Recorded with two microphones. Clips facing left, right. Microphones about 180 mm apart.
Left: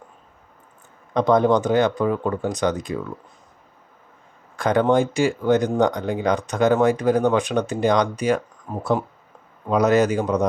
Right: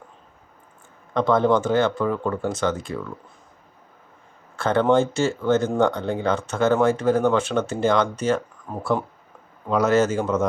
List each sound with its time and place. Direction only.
1.1 s speech: 15° left (ahead or behind)
4.5 s speech: 15° left (ahead or behind)